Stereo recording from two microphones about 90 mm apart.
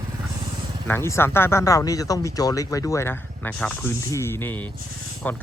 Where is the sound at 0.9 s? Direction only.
30° left (ahead or behind).